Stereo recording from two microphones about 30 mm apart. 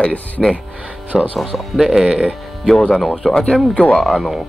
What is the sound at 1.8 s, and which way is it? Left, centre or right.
Speech, centre.